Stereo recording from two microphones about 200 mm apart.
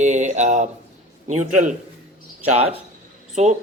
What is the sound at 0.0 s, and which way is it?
Speech, 35° right (ahead or behind).